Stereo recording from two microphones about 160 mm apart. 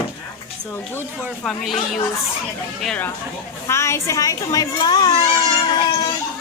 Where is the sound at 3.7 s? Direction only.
15° left (ahead or behind).